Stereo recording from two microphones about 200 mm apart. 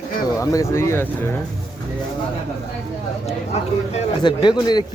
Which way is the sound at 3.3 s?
30° left (ahead or behind).